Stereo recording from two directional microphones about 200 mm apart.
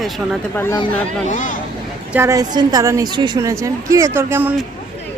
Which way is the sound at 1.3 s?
40° left (ahead or behind).